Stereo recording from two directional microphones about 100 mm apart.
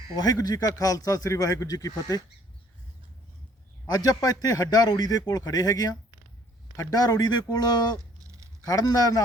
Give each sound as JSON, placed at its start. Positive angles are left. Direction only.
{"t": 0.2, "sound": "a man's voice", "side_deg": 40}
{"t": 3.8, "sound": "a man's voice", "side_deg": 40}